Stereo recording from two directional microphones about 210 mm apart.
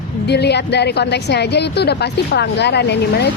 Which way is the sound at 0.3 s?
55° left (ahead or behind).